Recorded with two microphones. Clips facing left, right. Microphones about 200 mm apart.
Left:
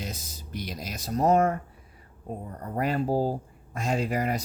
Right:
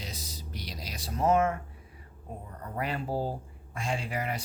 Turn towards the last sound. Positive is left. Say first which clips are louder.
# left 6 dB
turn(degrees=40)  # may be behind; listen again after turning